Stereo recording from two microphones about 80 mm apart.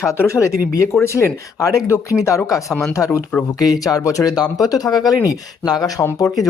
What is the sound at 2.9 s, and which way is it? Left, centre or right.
Speech, left.